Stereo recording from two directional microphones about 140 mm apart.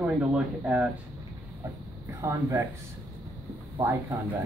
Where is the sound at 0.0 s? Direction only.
10° right (ahead or behind).